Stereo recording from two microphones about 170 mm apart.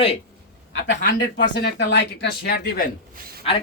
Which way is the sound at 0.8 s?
90° left.